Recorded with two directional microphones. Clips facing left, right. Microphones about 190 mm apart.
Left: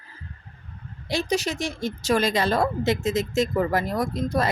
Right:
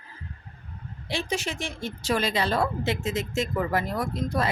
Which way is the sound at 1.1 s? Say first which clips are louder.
Left 5 dB; 40° left (ahead or behind).